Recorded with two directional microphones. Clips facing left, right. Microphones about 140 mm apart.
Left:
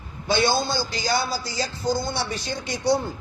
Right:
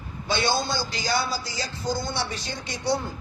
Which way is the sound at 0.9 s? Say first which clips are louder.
Left 3 dB; 35° left (ahead or behind).